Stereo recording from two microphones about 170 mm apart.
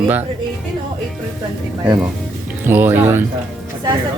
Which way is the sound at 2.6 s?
10° right (ahead or behind).